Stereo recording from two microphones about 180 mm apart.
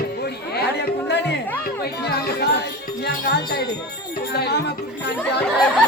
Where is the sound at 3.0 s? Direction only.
65° left (ahead or behind).